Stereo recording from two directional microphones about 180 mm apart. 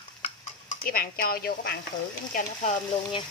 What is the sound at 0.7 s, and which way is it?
Speech, 50° left (ahead or behind).